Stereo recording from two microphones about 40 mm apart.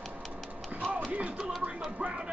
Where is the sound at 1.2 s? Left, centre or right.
Right.